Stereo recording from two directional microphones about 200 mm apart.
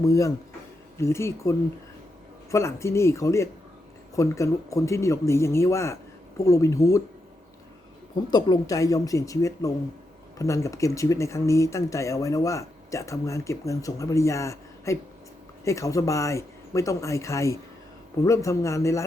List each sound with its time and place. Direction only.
0.0 s speech: 15° left (ahead or behind)
8.3 s speech: 20° left (ahead or behind)